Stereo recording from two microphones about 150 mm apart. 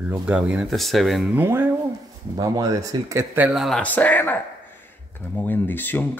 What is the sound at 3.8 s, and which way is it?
Speech, 10° left (ahead or behind).